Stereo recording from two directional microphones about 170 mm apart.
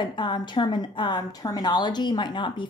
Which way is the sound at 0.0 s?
25° left (ahead or behind).